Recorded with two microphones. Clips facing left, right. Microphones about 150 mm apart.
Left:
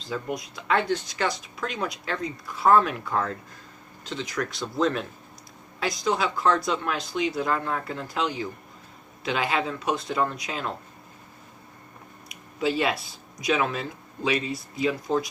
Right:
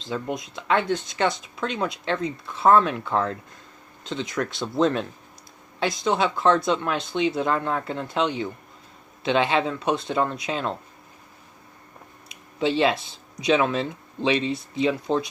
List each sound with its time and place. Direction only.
0.1 s speech: 25° right (ahead or behind)
12.3 s speech: 25° right (ahead or behind)